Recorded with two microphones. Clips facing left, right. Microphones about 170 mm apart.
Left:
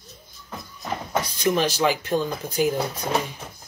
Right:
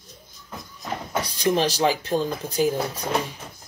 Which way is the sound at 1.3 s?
30° right (ahead or behind).